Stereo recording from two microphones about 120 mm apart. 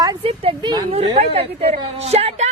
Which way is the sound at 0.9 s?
60° right (ahead or behind).